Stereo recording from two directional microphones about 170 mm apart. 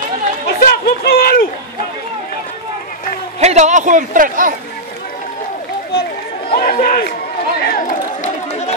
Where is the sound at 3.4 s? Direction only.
40° right (ahead or behind).